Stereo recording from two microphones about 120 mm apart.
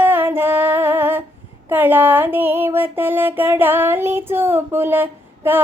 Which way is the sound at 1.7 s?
15° right (ahead or behind).